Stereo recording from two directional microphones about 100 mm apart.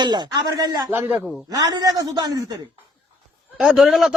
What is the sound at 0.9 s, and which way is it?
Speech, 20° right (ahead or behind).